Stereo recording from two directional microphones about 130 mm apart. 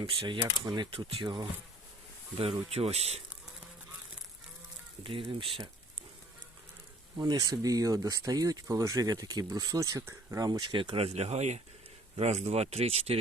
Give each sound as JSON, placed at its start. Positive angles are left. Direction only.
{"t": 0.4, "sound": "speech", "side_deg": -25}
{"t": 0.8, "sound": "speech", "side_deg": -40}
{"t": 2.4, "sound": "speech", "side_deg": -50}
{"t": 5.0, "sound": "speech", "side_deg": -45}
{"t": 7.2, "sound": "speech", "side_deg": -30}